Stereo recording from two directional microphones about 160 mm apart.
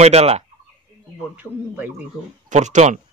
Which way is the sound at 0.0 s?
40° right (ahead or behind).